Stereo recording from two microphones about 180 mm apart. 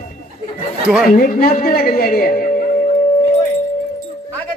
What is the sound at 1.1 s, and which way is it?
A woman's voice, 50° left (ahead or behind).